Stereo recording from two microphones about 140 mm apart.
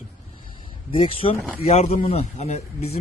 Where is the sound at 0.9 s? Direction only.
40° left (ahead or behind).